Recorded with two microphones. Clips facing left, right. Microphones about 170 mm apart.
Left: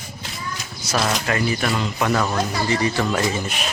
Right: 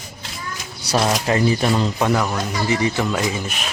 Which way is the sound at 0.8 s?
30° right (ahead or behind).